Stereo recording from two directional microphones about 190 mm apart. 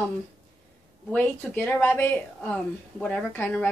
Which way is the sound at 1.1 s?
10° left (ahead or behind).